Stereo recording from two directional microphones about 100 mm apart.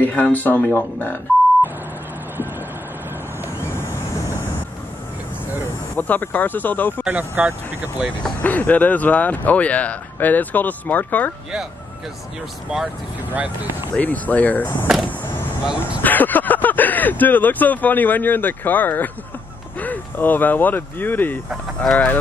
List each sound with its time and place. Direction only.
0.1 s speech: 15° left (ahead or behind)
5.9 s speech: 15° left (ahead or behind)
7.1 s speech: 15° right (ahead or behind)
8.2 s speech: 15° left (ahead or behind)
13.3 s speech: 15° right (ahead or behind)
13.9 s speech: 15° left (ahead or behind)
15.0 s vehicle: 20° left (ahead or behind)
15.6 s speech: 10° right (ahead or behind)
16.0 s speech: 15° left (ahead or behind)